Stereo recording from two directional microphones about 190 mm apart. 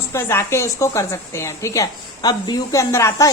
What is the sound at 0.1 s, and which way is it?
A woman's voice, 15° left (ahead or behind).